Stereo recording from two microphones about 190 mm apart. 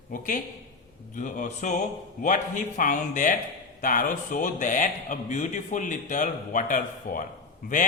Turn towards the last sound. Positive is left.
turn(degrees=45)  # may be behind; listen again after turning